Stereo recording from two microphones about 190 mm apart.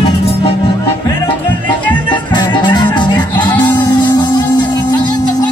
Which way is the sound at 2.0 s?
25° left (ahead or behind).